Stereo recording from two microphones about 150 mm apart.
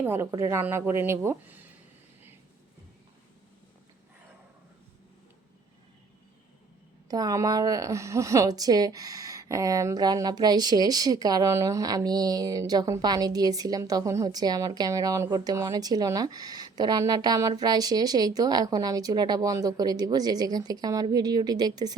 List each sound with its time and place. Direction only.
0.0 s a woman's voice: 15° right (ahead or behind)
7.1 s a woman's voice: 25° right (ahead or behind)